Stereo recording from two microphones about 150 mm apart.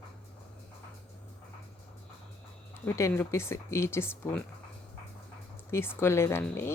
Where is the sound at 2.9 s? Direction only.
15° left (ahead or behind).